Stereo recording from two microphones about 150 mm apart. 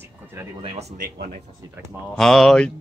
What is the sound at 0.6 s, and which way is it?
Speech, 40° right (ahead or behind).